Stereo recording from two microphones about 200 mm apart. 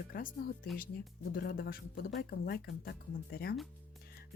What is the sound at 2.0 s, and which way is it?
Speech, 60° left (ahead or behind).